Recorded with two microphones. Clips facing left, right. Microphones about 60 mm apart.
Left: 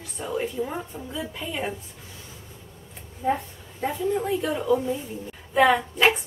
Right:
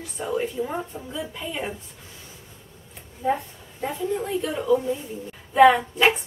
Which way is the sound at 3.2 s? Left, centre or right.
Centre.